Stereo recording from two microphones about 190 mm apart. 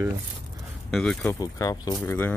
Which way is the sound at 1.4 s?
20° left (ahead or behind).